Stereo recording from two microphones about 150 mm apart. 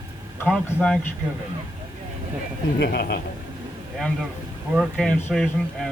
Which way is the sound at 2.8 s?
90° left.